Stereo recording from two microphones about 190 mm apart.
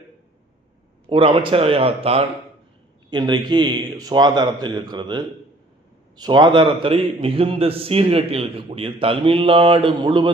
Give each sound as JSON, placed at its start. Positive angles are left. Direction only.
{"t": 1.1, "sound": "a man's voice", "side_deg": -25}